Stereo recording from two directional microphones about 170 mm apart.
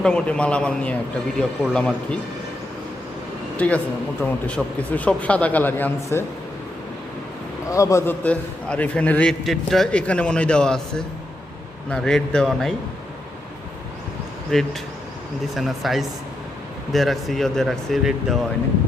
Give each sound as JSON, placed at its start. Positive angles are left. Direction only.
{"t": 0.0, "sound": "a man's voice", "side_deg": 5}
{"t": 3.6, "sound": "a man's voice", "side_deg": 10}
{"t": 7.7, "sound": "a man's voice", "side_deg": 20}
{"t": 15.5, "sound": "speech", "side_deg": 0}